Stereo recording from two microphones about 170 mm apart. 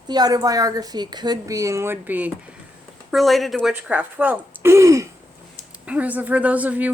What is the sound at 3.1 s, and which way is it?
Speech, centre (ahead or behind).